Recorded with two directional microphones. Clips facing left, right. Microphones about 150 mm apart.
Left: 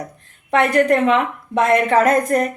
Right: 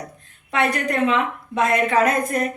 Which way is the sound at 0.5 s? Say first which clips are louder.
Left 7 dB; 55° left (ahead or behind).